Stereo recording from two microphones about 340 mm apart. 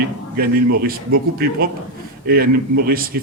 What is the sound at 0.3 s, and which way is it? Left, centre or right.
Speech, right.